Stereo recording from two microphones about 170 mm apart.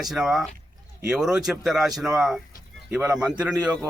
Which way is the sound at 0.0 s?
Centre (ahead or behind).